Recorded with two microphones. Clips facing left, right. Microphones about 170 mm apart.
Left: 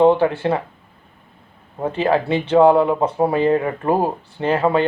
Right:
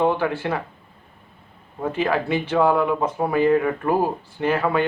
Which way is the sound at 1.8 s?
30° left (ahead or behind).